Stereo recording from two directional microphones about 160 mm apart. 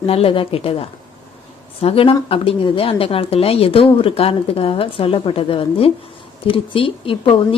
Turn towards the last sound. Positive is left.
turn(degrees=35)  # may be behind; listen again after turning